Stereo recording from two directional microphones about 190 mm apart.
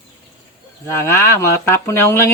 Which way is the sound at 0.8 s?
15° left (ahead or behind).